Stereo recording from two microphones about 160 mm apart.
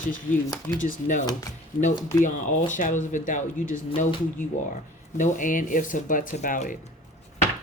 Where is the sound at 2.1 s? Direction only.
50° left (ahead or behind).